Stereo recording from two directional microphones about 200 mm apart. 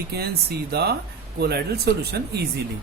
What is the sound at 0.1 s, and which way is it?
Speech, 55° right (ahead or behind).